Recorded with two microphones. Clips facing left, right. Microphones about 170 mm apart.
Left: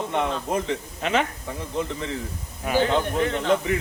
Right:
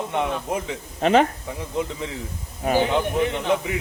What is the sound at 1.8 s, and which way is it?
Speech, 10° right (ahead or behind).